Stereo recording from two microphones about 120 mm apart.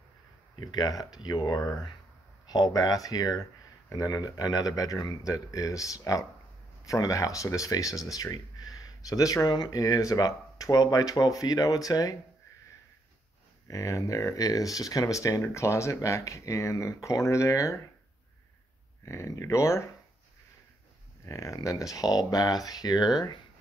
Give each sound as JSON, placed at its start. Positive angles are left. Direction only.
{"t": 0.6, "sound": "speech", "side_deg": 35}
{"t": 13.7, "sound": "speech", "side_deg": 25}
{"t": 19.0, "sound": "speech", "side_deg": 25}
{"t": 21.3, "sound": "speech", "side_deg": 25}